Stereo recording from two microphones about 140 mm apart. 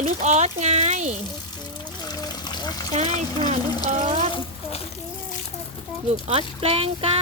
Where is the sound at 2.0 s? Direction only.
30° left (ahead or behind).